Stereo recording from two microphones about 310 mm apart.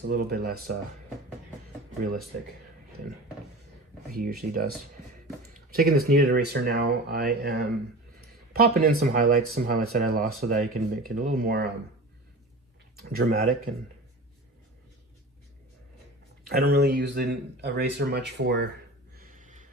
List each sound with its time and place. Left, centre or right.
0.1 s speech: right
4.1 s speech: right
5.7 s speech: right
13.0 s speech: right
16.5 s speech: right
19.1 s a sound: right